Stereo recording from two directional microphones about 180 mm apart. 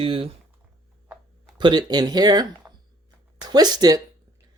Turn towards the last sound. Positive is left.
turn(degrees=-20)  # may be behind; listen again after turning